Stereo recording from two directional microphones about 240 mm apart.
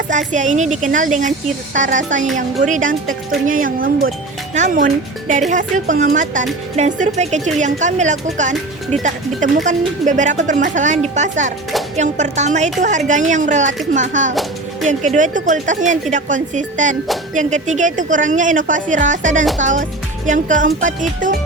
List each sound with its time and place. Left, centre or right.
0.1 s a woman's voice: right
9.6 s a woman's voice: right